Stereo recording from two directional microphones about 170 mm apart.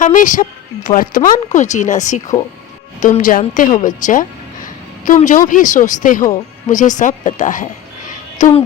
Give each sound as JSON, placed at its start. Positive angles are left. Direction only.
{"t": 0.0, "sound": "a woman's voice", "side_deg": 50}